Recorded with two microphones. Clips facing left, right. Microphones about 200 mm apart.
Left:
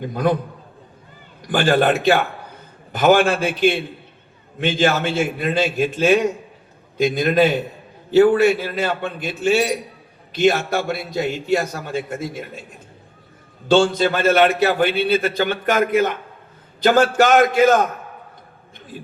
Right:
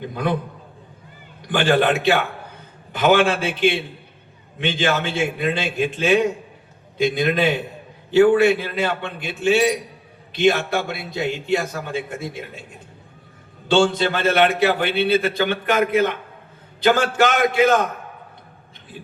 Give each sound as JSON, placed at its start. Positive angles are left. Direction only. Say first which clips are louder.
{"t": 0.0, "sound": "a man's voice", "louder": "left 4 dB", "side_deg": 45}
{"t": 1.5, "sound": "a man's voice", "louder": "left 1 dB", "side_deg": 40}
{"t": 13.7, "sound": "a man's voice", "louder": "left 2 dB", "side_deg": 40}